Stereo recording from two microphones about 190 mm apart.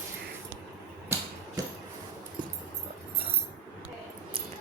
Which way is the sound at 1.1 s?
15° right (ahead or behind).